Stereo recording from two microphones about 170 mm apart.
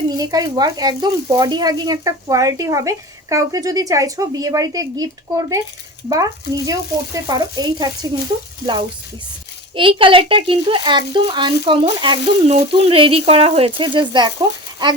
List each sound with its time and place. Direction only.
0.1 s speech: 25° right (ahead or behind)
9.7 s speech: 30° right (ahead or behind)